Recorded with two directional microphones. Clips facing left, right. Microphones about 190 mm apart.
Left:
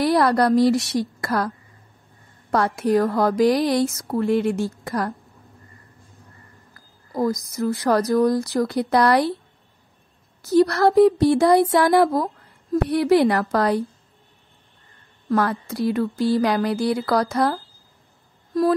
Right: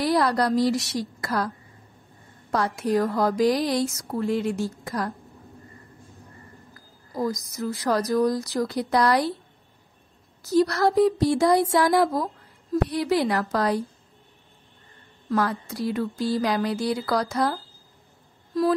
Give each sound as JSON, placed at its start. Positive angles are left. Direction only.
{"t": 0.0, "sound": "a woman's voice", "side_deg": 60}
{"t": 2.5, "sound": "a woman's voice", "side_deg": 55}
{"t": 7.2, "sound": "a woman's voice", "side_deg": 55}
{"t": 10.5, "sound": "a woman's voice", "side_deg": 60}
{"t": 15.2, "sound": "a woman's voice", "side_deg": 60}